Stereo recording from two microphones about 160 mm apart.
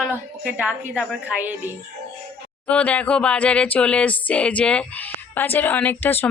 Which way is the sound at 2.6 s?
10° left (ahead or behind).